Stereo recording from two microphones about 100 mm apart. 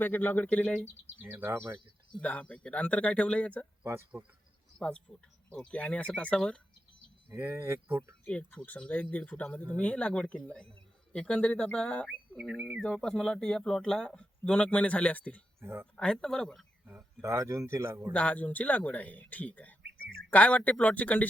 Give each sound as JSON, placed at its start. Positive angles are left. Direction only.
{"t": 0.0, "sound": "speech", "side_deg": 20}
{"t": 1.2, "sound": "speech", "side_deg": -20}
{"t": 2.1, "sound": "speech", "side_deg": 10}
{"t": 4.1, "sound": "speech", "side_deg": -25}
{"t": 4.8, "sound": "speech", "side_deg": 10}
{"t": 7.3, "sound": "speech", "side_deg": -20}
{"t": 8.2, "sound": "speech", "side_deg": 15}
{"t": 15.6, "sound": "speech", "side_deg": -25}
{"t": 16.0, "sound": "speech", "side_deg": 5}
{"t": 16.8, "sound": "a sound", "side_deg": -20}
{"t": 17.2, "sound": "speech", "side_deg": -30}
{"t": 18.1, "sound": "speech", "side_deg": 15}